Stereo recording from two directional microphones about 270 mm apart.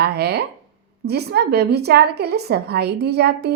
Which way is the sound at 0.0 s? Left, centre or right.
Right.